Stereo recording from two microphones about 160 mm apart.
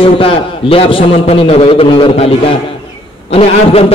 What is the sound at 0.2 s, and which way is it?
A man's voice, 35° left (ahead or behind).